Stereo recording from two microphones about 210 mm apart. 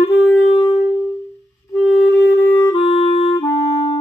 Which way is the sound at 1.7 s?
Centre (ahead or behind).